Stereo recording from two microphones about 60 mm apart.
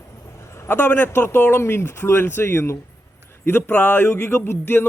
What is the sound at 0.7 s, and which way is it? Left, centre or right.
Speech, left.